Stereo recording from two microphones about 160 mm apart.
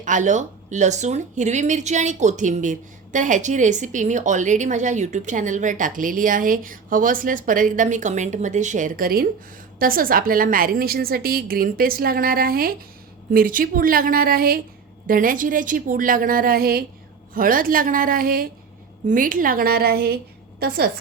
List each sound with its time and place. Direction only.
0.0 s a woman's voice: 50° right (ahead or behind); by 16.8 s 70° right (ahead or behind)
17.3 s a woman's voice: 60° right (ahead or behind)